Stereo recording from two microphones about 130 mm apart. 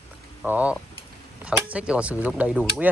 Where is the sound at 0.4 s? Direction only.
10° right (ahead or behind).